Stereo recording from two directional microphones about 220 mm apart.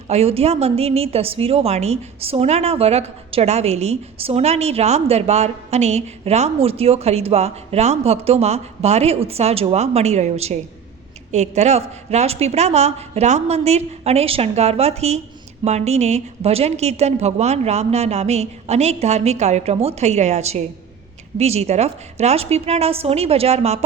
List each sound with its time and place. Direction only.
0.1 s a woman's voice: 30° right (ahead or behind)